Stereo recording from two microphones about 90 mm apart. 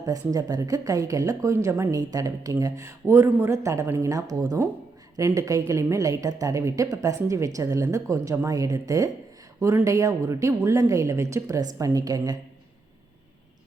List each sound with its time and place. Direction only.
0.0 s a woman's voice: 40° right (ahead or behind)
2.0 s a woman's voice: 45° right (ahead or behind)